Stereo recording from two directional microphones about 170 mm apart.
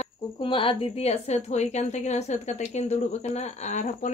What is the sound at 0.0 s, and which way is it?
A woman's voice, 30° left (ahead or behind).